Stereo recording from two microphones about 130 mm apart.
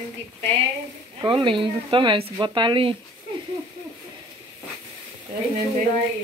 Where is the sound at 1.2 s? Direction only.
40° right (ahead or behind).